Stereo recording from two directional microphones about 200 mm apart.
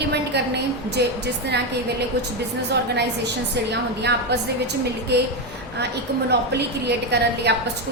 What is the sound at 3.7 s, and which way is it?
A woman's voice, 55° right (ahead or behind).